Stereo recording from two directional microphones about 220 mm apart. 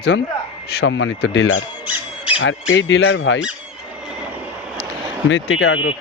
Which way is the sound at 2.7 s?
55° left (ahead or behind).